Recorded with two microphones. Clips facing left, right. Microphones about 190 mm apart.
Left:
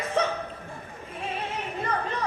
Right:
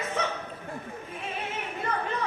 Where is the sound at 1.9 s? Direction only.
35° left (ahead or behind).